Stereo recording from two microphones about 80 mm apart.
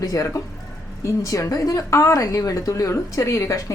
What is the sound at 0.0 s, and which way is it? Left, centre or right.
A woman's voice, left.